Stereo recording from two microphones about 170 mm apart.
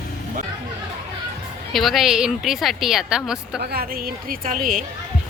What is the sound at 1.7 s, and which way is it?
A woman's voice, centre (ahead or behind).